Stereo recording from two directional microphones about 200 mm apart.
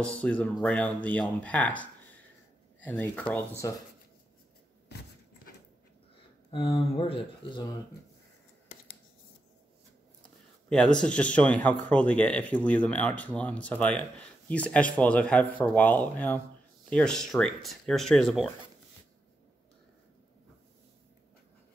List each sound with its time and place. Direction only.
0.2 s a man's voice: 5° left (ahead or behind)
6.5 s speech: 25° left (ahead or behind)
10.7 s a man's voice: 5° left (ahead or behind)